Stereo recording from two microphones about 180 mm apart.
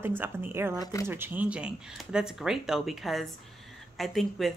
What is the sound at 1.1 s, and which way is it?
Speech, 10° right (ahead or behind).